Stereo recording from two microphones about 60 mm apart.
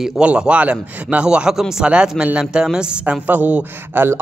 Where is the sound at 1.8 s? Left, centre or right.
Centre.